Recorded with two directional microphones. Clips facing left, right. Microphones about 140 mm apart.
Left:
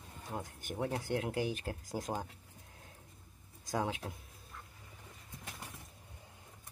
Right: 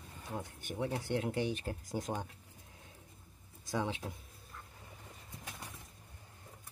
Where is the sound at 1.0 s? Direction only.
45° left (ahead or behind).